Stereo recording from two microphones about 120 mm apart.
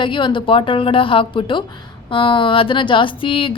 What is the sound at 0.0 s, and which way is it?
A woman's voice, 40° left (ahead or behind).